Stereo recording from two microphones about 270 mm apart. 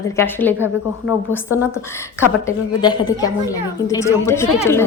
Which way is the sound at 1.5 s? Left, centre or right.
Centre.